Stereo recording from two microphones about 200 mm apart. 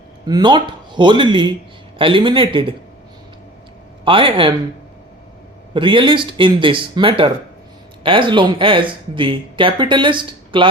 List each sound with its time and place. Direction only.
0.3 s speech: 20° right (ahead or behind)
4.0 s speech: 25° right (ahead or behind)
5.7 s speech: 25° right (ahead or behind)